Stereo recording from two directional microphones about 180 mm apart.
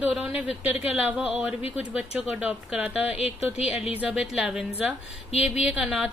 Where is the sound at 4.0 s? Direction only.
Centre (ahead or behind).